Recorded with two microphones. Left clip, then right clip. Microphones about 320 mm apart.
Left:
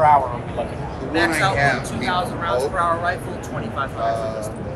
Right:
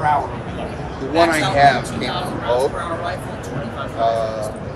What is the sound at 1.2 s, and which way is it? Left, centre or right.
Speech, right.